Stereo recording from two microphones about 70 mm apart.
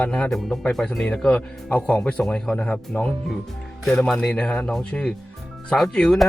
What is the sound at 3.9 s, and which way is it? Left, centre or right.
A man's voice, centre.